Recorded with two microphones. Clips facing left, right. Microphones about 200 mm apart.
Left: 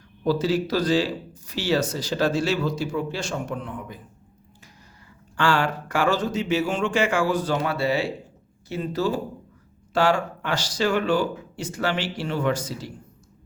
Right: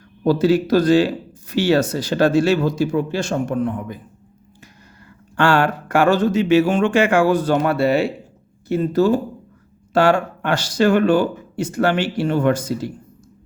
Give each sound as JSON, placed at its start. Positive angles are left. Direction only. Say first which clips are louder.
{"t": 0.3, "sound": "speech", "louder": "right 7 dB", "side_deg": -60}
{"t": 5.4, "sound": "speech", "louder": "right 6 dB", "side_deg": -60}